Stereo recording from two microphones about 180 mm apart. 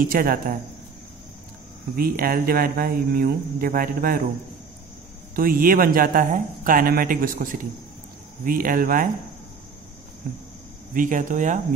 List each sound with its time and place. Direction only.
0.0 s speech: 50° right (ahead or behind)
2.0 s speech: 55° right (ahead or behind)
5.3 s speech: 55° right (ahead or behind)
10.9 s speech: 45° right (ahead or behind)